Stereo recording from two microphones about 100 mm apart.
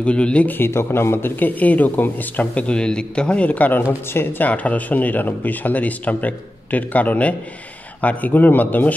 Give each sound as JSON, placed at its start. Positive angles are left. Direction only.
{"t": 0.0, "sound": "a man's voice", "side_deg": 10}